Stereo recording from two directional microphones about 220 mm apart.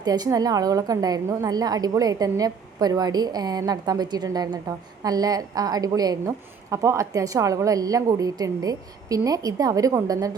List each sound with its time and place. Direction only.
0.0 s a woman's voice: 15° right (ahead or behind)